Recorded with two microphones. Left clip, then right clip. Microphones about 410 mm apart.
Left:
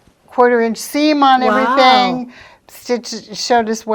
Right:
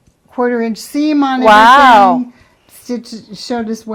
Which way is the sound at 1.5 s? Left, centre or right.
Right.